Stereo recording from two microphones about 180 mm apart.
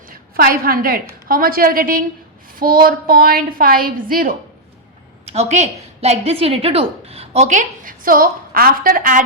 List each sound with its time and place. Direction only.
0.1 s a woman's voice: 55° right (ahead or behind)
5.2 s a woman's voice: 40° right (ahead or behind)